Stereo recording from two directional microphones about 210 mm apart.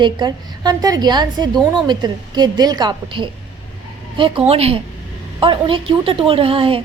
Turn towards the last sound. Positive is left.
turn(degrees=-25)  # may be behind; listen again after turning